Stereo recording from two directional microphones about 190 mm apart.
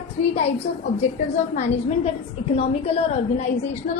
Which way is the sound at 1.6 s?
35° left (ahead or behind).